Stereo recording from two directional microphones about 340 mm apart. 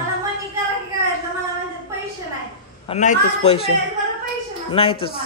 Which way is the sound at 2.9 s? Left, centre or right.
Left.